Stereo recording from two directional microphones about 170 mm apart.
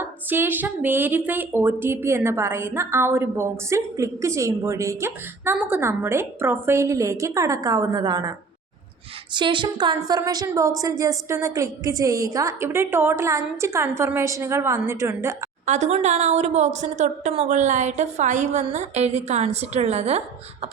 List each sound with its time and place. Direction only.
0.0 s speech: 10° right (ahead or behind)
15.6 s a woman's voice: 45° right (ahead or behind)